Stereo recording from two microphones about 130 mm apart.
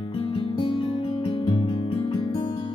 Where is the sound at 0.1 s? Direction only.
45° left (ahead or behind).